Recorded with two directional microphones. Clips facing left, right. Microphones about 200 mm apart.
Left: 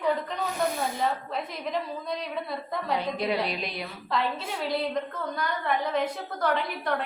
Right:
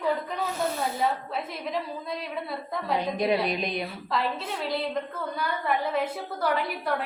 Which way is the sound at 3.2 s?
20° right (ahead or behind).